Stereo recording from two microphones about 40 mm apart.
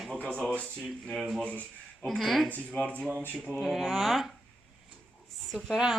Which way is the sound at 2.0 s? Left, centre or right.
Centre.